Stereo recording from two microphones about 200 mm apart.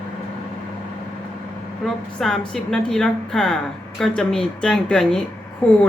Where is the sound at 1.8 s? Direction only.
5° left (ahead or behind).